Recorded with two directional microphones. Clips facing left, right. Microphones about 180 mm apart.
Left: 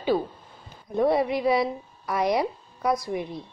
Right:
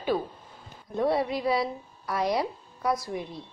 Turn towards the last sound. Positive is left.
turn(degrees=15)  # may be behind; listen again after turning